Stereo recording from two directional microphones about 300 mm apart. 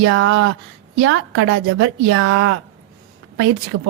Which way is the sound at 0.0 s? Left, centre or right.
Right.